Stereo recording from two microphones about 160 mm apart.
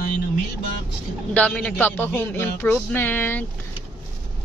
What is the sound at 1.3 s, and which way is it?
Speech, 5° left (ahead or behind).